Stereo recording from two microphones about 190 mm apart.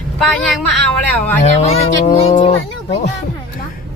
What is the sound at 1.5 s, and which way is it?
Speech, 35° left (ahead or behind).